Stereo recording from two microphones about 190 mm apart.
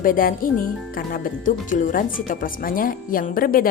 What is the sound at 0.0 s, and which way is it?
Speech, 45° left (ahead or behind).